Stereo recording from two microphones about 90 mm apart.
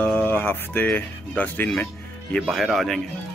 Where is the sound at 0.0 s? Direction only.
20° left (ahead or behind).